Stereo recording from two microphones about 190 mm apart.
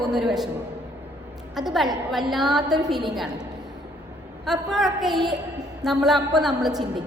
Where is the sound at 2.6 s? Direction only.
20° right (ahead or behind).